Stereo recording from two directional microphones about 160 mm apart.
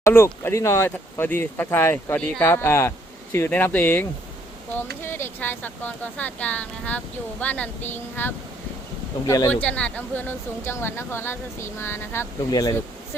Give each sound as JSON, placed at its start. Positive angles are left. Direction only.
{"t": 0.0, "sound": "speech", "side_deg": 15}
{"t": 5.0, "sound": "speech", "side_deg": 15}
{"t": 9.5, "sound": "speech", "side_deg": 10}